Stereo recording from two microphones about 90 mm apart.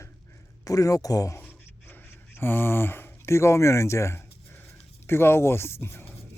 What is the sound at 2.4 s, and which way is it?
Speech, 25° left (ahead or behind).